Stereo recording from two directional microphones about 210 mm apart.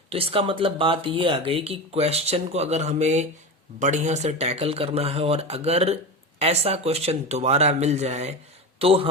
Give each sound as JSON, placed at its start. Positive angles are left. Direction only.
{"t": 0.1, "sound": "speech", "side_deg": -25}